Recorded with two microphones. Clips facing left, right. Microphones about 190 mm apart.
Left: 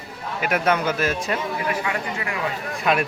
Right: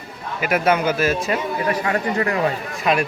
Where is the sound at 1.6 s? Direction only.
40° right (ahead or behind).